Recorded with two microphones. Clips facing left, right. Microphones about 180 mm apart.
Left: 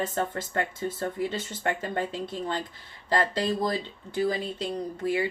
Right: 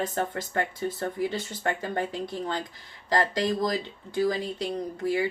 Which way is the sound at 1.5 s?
20° left (ahead or behind).